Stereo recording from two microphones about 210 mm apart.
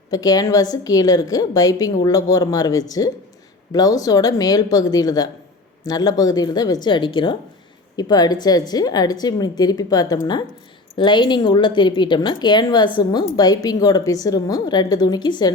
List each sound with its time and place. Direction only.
0.1 s a woman's voice: 15° left (ahead or behind)